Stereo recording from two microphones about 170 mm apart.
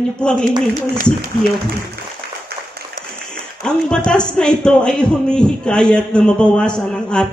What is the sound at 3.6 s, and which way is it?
A man's voice, 5° left (ahead or behind).